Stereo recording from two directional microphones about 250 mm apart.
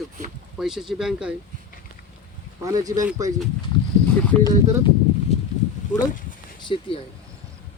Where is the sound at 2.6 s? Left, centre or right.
Centre.